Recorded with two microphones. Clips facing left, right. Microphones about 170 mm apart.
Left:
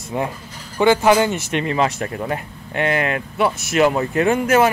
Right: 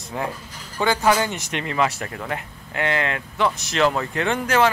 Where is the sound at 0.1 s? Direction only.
20° left (ahead or behind).